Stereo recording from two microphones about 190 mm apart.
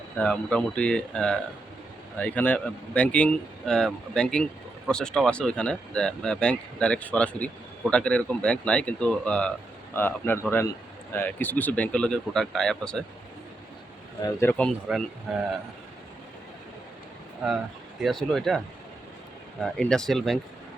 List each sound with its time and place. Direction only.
0.2 s speech: 5° left (ahead or behind)
14.2 s speech: 20° left (ahead or behind)
14.9 s speech: 5° right (ahead or behind)
18.0 s speech: centre (ahead or behind)